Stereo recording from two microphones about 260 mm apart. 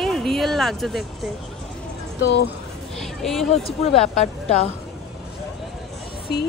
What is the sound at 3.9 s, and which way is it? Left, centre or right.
Speech, left.